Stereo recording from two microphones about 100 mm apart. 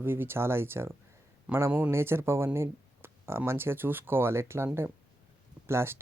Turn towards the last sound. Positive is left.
turn(degrees=-25)  # may be behind; listen again after turning